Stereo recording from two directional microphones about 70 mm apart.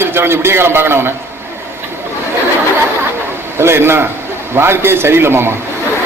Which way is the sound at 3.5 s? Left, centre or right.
Right.